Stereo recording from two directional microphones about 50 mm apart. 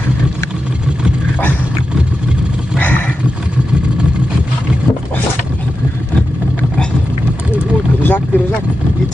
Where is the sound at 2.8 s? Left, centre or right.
Left.